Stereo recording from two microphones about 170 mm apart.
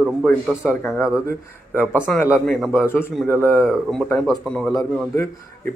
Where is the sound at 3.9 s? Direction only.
5° left (ahead or behind).